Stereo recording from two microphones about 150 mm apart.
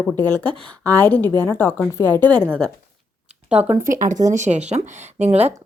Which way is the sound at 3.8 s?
60° right (ahead or behind).